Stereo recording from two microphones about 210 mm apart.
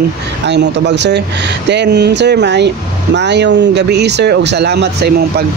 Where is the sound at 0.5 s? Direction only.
55° right (ahead or behind).